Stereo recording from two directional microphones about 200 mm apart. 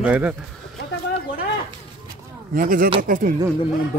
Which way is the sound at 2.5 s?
45° right (ahead or behind).